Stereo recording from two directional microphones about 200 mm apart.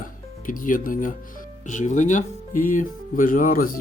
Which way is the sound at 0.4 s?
40° left (ahead or behind).